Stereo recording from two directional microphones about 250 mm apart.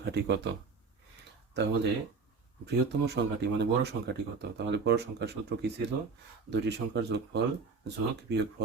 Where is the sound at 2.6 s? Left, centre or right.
Right.